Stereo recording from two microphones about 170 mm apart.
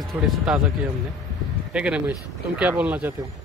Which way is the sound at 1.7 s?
5° right (ahead or behind).